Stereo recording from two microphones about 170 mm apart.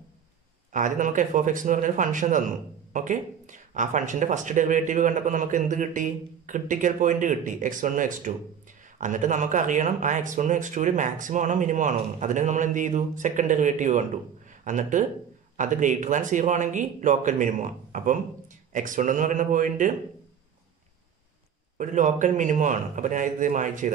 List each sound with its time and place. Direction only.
0.7 s speech: 50° right (ahead or behind)
21.7 s speech: 50° right (ahead or behind)